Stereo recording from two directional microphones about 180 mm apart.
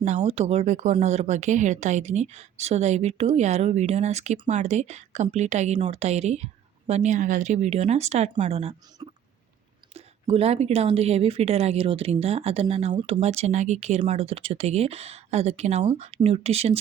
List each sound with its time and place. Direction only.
0.0 s a woman's voice: 40° right (ahead or behind)
9.0 s a sound: 25° right (ahead or behind)
9.9 s a woman's voice: 35° right (ahead or behind)